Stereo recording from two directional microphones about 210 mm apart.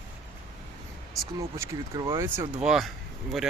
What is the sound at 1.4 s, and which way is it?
Speech, 15° right (ahead or behind).